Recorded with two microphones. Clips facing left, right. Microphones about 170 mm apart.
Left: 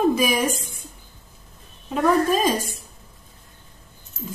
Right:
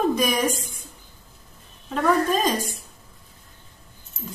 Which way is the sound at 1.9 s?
5° left (ahead or behind).